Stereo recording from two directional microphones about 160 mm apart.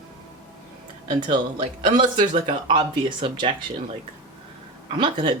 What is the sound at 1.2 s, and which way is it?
Speech, 30° right (ahead or behind).